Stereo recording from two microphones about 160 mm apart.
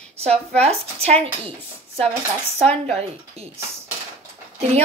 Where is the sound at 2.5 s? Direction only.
45° right (ahead or behind).